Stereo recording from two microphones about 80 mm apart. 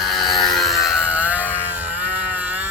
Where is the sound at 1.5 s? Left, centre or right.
Right.